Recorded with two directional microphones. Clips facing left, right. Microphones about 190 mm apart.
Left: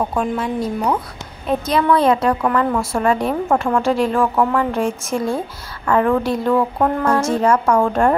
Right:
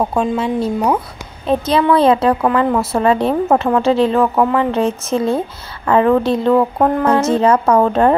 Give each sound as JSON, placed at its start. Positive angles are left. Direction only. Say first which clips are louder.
{"t": 0.1, "sound": "a woman's voice", "louder": "right 4 dB", "side_deg": -25}